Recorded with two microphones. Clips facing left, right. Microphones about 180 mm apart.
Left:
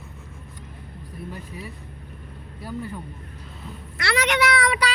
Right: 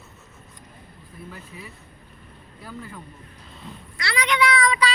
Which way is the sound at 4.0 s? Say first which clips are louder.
Left 1 dB; 65° left (ahead or behind).